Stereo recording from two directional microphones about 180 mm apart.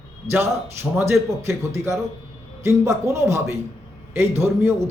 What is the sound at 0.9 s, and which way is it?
A man's voice, 15° right (ahead or behind).